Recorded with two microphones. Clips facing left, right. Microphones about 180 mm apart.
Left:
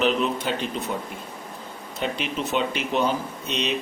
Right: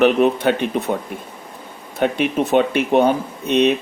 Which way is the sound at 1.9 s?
55° right (ahead or behind).